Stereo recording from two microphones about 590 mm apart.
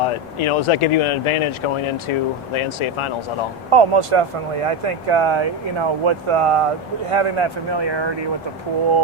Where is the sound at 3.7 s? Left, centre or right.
Right.